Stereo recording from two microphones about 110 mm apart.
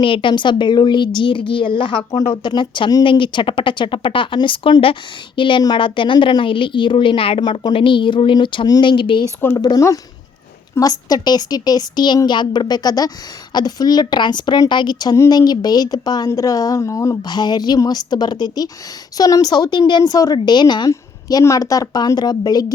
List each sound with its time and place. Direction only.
0.0 s speech: 50° left (ahead or behind)
9.6 s speech: 35° left (ahead or behind)
20.9 s speech: 30° left (ahead or behind)